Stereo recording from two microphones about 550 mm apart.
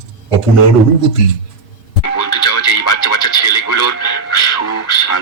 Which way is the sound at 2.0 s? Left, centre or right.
Left.